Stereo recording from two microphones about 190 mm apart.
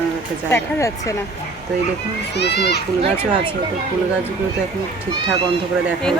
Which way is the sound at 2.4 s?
60° left (ahead or behind).